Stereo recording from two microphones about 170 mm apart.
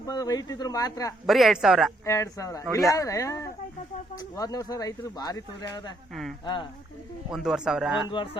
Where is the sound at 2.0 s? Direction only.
15° left (ahead or behind).